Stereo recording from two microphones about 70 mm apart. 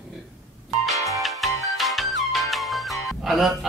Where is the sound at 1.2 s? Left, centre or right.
Centre.